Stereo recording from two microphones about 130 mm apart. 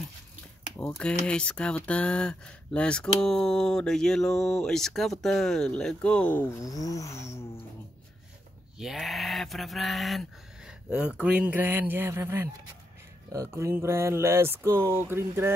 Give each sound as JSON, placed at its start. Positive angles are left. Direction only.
{"t": 0.7, "sound": "speech", "side_deg": 10}
{"t": 6.8, "sound": "a sound", "side_deg": 25}
{"t": 8.7, "sound": "speech", "side_deg": 0}